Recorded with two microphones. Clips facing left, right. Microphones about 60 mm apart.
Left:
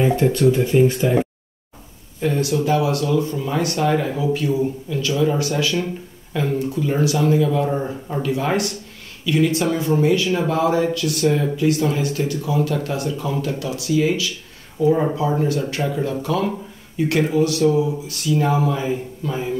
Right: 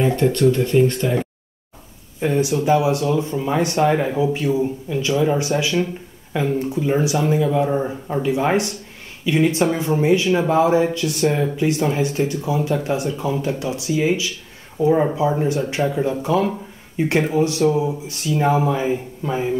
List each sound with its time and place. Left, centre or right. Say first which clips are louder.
0.0 s speech: even; centre
2.1 s speech: right 1 dB; centre